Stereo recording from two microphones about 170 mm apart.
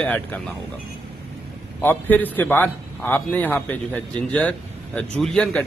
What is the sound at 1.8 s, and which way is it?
A man's voice, 10° left (ahead or behind).